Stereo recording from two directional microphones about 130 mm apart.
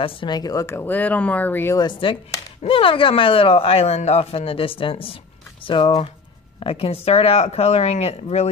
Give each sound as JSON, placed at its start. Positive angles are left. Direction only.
{"t": 0.0, "sound": "speech", "side_deg": 40}
{"t": 1.8, "sound": "speech", "side_deg": 40}